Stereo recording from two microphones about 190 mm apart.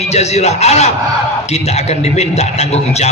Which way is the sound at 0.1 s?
35° left (ahead or behind).